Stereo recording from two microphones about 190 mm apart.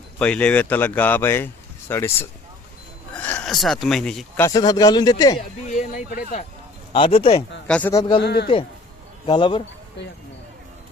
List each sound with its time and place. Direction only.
0.2 s speech: 5° left (ahead or behind)
3.2 s speech: 10° left (ahead or behind)
4.4 s a man's voice: 20° left (ahead or behind)
5.6 s speech: 40° left (ahead or behind)
6.9 s speech: 30° left (ahead or behind)
7.7 s speech: 10° left (ahead or behind)
8.2 s a man's voice: 60° left (ahead or behind)
9.2 s a man's voice: 25° left (ahead or behind)